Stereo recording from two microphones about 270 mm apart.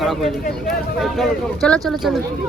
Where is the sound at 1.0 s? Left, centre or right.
Centre.